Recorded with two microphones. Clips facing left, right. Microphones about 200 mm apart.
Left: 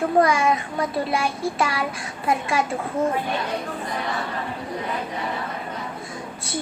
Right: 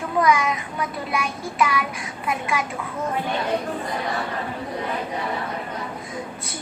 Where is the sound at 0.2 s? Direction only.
30° left (ahead or behind).